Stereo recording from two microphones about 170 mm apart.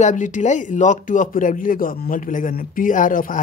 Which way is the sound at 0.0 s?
45° left (ahead or behind).